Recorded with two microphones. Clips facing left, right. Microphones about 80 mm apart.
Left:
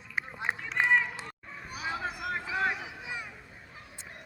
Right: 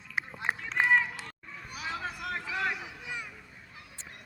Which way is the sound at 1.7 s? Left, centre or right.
Left.